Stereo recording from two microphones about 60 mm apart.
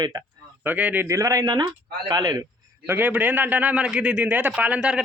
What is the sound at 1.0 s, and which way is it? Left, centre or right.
Speech, right.